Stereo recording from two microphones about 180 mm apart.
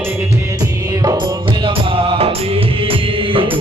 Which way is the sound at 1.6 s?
30° right (ahead or behind).